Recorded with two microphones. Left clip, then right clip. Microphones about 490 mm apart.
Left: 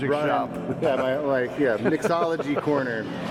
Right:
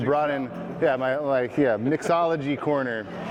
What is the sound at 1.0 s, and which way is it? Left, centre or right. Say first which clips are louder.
A man's voice: even; right.